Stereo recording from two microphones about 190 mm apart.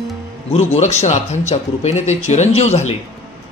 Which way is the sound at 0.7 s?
35° left (ahead or behind).